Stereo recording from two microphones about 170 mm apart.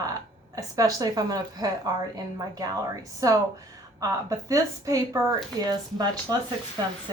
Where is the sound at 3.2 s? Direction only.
20° right (ahead or behind).